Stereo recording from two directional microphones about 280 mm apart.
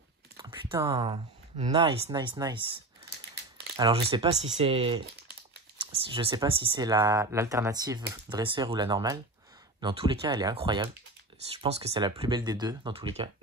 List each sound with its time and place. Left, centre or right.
0.4 s speech: centre
3.7 s speech: centre